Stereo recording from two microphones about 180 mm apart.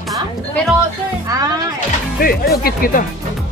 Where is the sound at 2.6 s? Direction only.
50° left (ahead or behind).